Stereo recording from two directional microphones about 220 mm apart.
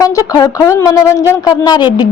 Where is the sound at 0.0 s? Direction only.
15° left (ahead or behind).